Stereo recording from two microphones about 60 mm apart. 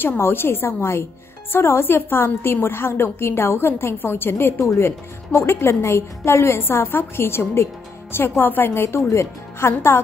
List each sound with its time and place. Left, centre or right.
0.0 s a woman's voice: left